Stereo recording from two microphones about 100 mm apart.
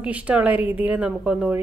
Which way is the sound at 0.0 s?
15° right (ahead or behind).